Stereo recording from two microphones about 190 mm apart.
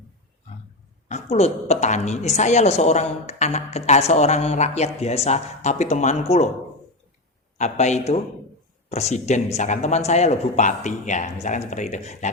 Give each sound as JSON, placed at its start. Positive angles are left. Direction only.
{"t": 1.0, "sound": "a woman's voice", "side_deg": 35}
{"t": 7.6, "sound": "a woman's voice", "side_deg": 35}